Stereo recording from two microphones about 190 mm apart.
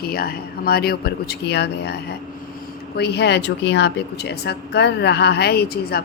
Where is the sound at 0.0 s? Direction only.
55° left (ahead or behind).